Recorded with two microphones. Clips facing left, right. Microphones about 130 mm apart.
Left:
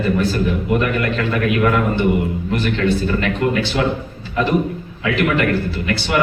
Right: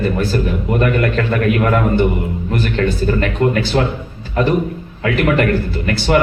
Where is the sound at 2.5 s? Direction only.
40° right (ahead or behind).